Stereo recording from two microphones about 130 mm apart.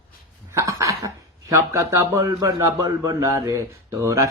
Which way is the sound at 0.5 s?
25° right (ahead or behind).